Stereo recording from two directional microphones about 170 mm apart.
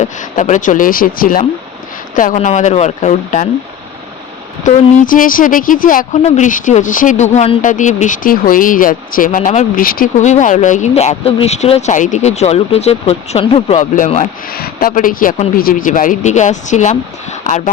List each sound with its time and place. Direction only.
0.0 s speech: 50° left (ahead or behind)
4.6 s speech: 55° left (ahead or behind); by 13.7 s 35° left (ahead or behind)
13.7 s speech: 45° left (ahead or behind)
14.5 s speech: 60° left (ahead or behind); by 17.6 s 45° left (ahead or behind)